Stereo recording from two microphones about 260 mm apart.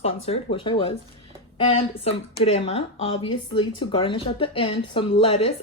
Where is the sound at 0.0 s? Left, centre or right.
Left.